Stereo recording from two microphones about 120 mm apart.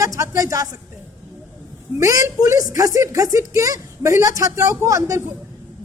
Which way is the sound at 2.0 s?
30° right (ahead or behind).